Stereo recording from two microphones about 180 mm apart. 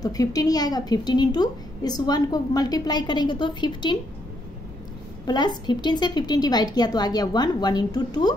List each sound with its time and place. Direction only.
0.0 s a woman's voice: 20° left (ahead or behind)
5.2 s a woman's voice: 25° left (ahead or behind)